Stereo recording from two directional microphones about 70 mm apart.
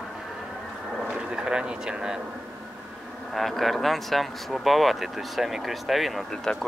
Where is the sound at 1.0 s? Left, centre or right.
Centre.